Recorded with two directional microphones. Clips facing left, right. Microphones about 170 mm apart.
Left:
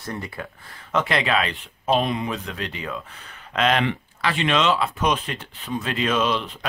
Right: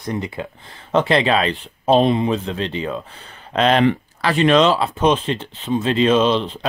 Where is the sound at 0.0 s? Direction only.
20° right (ahead or behind).